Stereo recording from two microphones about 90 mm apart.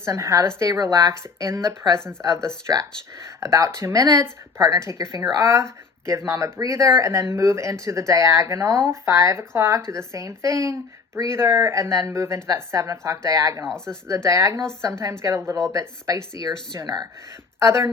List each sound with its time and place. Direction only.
0.0 s speech: 35° right (ahead or behind)
13.7 s speech: 5° left (ahead or behind)
14.1 s speech: 35° right (ahead or behind)
16.7 s speech: 45° right (ahead or behind)
17.6 s speech: 30° right (ahead or behind)